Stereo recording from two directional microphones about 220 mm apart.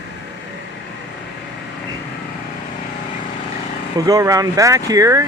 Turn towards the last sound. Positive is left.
turn(degrees=-15)  # may be behind; listen again after turning